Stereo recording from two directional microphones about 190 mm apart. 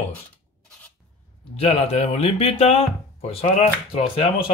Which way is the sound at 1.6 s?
30° left (ahead or behind).